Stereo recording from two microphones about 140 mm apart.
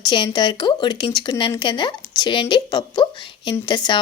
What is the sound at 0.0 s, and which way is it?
A woman's voice, 35° left (ahead or behind).